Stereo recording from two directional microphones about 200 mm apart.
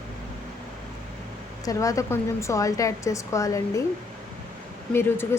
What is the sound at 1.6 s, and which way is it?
Speech, 15° left (ahead or behind).